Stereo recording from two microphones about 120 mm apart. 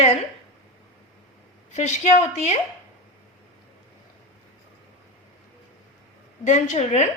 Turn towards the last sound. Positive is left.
turn(degrees=65)  # may be behind; listen again after turning